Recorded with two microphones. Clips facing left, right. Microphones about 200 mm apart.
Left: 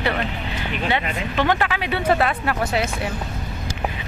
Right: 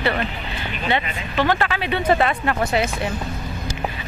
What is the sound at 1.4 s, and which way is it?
Speech, 15° left (ahead or behind).